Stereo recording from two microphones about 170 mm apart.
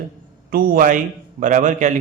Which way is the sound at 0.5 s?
55° right (ahead or behind).